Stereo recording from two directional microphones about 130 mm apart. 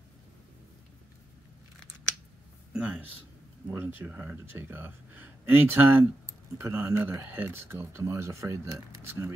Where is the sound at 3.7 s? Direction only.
15° right (ahead or behind).